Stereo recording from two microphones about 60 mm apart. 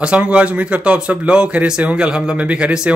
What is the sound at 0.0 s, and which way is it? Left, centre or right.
Speech, centre.